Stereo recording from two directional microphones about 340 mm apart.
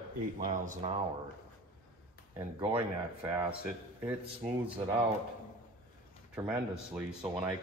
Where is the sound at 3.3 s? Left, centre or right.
Centre.